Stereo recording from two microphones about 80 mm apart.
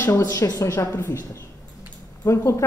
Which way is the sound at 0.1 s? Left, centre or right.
Left.